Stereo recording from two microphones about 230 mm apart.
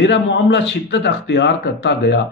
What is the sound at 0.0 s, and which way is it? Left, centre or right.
A man's voice, left.